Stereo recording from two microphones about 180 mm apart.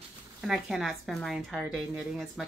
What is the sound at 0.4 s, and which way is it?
Speech, centre (ahead or behind).